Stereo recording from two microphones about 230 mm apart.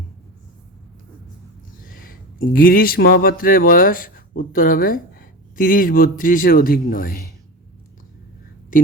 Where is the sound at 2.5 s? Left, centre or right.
Left.